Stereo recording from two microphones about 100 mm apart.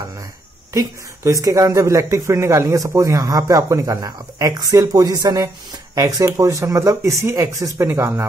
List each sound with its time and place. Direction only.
0.7 s speech: 35° right (ahead or behind)